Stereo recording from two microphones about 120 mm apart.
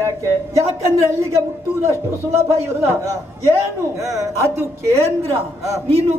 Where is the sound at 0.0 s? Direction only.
25° right (ahead or behind).